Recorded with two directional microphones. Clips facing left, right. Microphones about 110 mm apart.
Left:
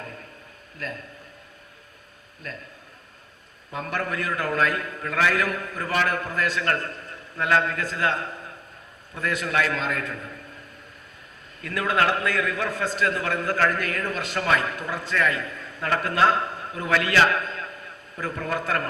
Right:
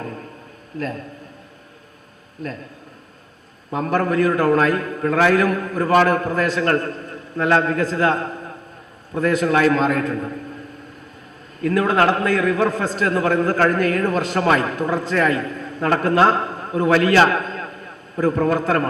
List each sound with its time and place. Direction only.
0.0 s a sound: 40° right (ahead or behind)
0.8 s a man's voice: 40° right (ahead or behind)
3.7 s a man's voice: 40° right (ahead or behind)
11.6 s a man's voice: 40° right (ahead or behind)